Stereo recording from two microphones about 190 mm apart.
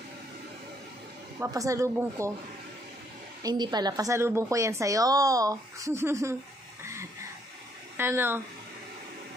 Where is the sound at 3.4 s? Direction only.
20° right (ahead or behind).